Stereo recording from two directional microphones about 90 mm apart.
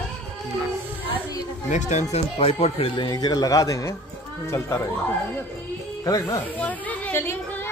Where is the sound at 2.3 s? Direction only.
90° left.